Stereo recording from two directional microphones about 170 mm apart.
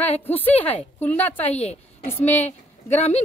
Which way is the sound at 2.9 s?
40° left (ahead or behind).